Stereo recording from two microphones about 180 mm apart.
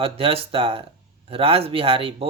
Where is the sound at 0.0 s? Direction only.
30° right (ahead or behind).